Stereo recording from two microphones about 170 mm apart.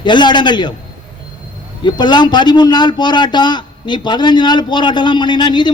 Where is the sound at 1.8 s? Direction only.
25° left (ahead or behind).